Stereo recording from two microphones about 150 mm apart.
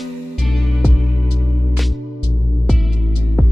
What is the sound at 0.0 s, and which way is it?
Music, centre (ahead or behind).